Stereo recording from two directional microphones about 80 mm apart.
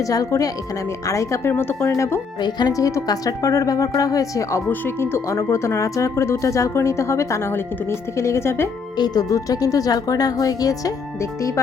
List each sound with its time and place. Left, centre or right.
0.0 s speech: left
2.4 s speech: left
4.7 s speech: left
9.0 s speech: left